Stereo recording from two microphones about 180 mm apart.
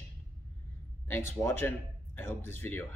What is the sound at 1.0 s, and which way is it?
Speech, 10° left (ahead or behind).